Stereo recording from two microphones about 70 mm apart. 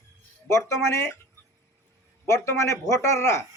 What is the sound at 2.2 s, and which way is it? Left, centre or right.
A man's voice, left.